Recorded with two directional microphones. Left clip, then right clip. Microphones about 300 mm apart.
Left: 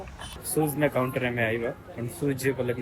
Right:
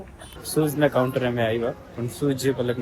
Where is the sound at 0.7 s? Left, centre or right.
Centre.